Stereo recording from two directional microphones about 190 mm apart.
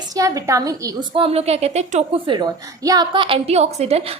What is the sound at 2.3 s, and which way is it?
A woman's voice, 20° right (ahead or behind).